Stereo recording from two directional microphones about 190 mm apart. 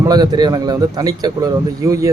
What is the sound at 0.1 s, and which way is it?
A man's voice, 20° right (ahead or behind).